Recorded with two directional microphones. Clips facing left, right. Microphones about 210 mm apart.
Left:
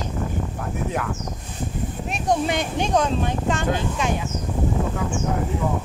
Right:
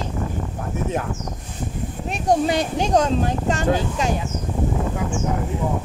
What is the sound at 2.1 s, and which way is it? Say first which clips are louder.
Speech: right 3 dB; 35° right (ahead or behind).